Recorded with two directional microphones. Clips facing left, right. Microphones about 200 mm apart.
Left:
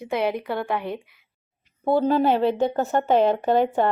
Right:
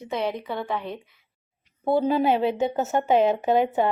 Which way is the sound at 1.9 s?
10° right (ahead or behind).